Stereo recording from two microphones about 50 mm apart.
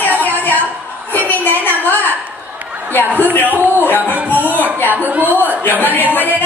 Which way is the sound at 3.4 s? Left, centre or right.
Right.